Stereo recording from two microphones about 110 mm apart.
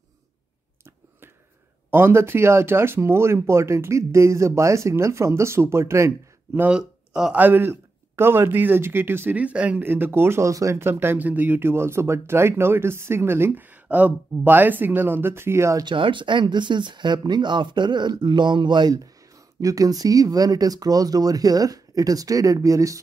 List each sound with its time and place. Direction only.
1.9 s a man's voice: 20° right (ahead or behind)
6.7 s speech: 5° right (ahead or behind)
7.3 s a man's voice: 20° right (ahead or behind)
15.8 s speech: 45° right (ahead or behind); by 22.9 s 30° right (ahead or behind)